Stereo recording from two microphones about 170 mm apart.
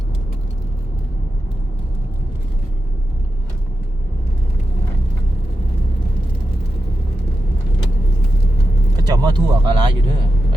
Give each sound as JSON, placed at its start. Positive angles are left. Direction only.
{"t": 9.0, "sound": "speech", "side_deg": -25}